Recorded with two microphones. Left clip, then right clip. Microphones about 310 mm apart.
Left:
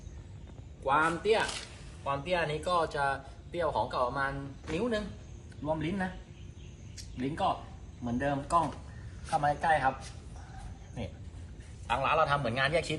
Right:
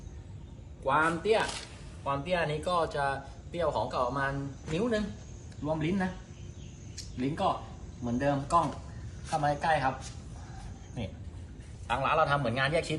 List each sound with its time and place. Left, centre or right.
0.9 s speech: centre
5.6 s speech: centre
7.2 s speech: centre
11.0 s speech: centre